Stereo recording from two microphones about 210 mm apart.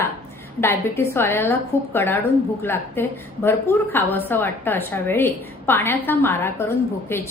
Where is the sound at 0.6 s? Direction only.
10° left (ahead or behind).